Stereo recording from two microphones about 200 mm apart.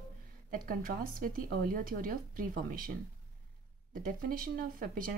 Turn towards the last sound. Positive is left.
turn(degrees=-45)  # may be behind; listen again after turning